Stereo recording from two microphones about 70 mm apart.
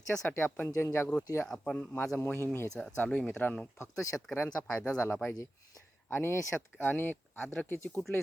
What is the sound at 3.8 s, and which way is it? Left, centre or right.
Speech, left.